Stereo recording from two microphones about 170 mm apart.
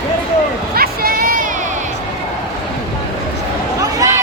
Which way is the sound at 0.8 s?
60° right (ahead or behind).